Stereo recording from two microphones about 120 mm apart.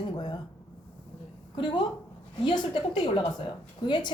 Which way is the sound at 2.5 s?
40° left (ahead or behind).